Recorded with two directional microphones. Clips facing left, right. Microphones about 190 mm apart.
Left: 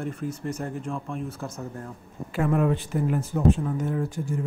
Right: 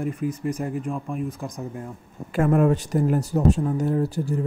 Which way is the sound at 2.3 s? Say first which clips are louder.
Right 4 dB; 50° right (ahead or behind).